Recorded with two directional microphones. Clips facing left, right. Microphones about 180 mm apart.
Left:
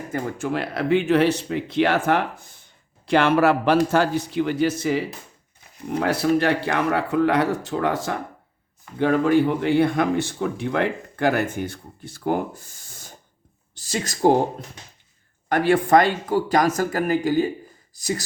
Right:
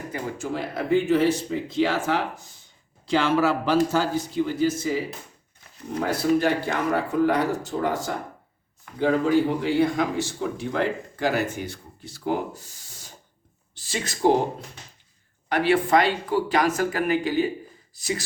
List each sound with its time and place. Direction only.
0.1 s speech: 60° left (ahead or behind); by 14.3 s 45° left (ahead or behind)
15.4 s speech: 50° left (ahead or behind)